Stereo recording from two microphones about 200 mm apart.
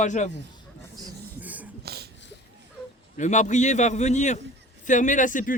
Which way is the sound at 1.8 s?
55° right (ahead or behind).